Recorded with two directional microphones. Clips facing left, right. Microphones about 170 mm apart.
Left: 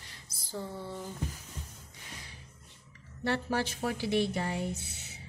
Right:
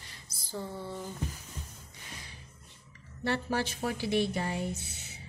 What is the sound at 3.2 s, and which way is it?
A woman's voice, centre (ahead or behind).